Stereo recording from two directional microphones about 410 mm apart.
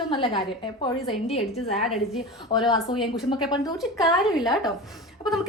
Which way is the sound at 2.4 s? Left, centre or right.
Centre.